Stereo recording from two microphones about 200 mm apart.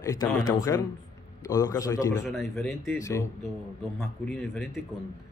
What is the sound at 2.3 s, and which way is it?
Speech, centre (ahead or behind).